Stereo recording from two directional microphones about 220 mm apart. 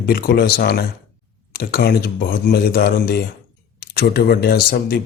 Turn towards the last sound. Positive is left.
turn(degrees=45)  # may be behind; listen again after turning